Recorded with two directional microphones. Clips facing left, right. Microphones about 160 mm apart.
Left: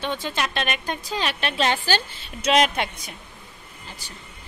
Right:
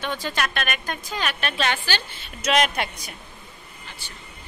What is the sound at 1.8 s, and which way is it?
Speech, 40° left (ahead or behind).